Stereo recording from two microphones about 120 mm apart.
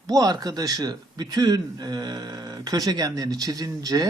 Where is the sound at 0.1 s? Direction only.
30° right (ahead or behind).